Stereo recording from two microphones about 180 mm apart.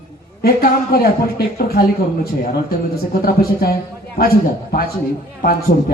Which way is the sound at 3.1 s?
55° left (ahead or behind).